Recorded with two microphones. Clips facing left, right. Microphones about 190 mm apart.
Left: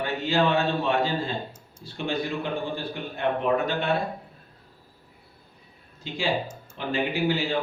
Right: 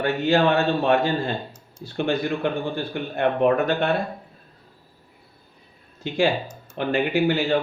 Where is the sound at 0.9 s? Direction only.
60° right (ahead or behind).